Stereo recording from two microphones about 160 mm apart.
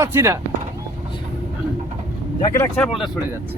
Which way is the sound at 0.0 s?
15° right (ahead or behind).